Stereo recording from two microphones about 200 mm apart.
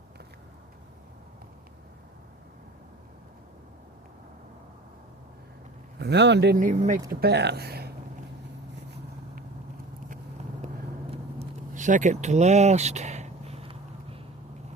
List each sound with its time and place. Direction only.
6.0 s speech: 60° right (ahead or behind); by 7.0 s 40° right (ahead or behind)
7.1 s speech: 55° right (ahead or behind)
11.1 s vehicle: 35° right (ahead or behind)